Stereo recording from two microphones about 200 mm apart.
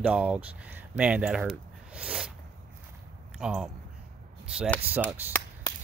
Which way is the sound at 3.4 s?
5° right (ahead or behind).